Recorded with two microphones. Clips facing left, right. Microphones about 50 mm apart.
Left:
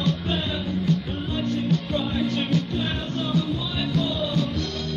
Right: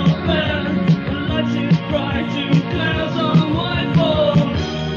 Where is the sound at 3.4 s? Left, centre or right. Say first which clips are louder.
Right 8 dB; right.